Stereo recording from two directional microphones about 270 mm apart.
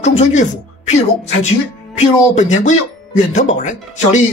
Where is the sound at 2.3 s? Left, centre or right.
Left.